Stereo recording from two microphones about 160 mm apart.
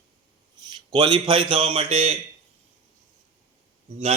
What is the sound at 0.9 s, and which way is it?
A man's voice, 30° right (ahead or behind).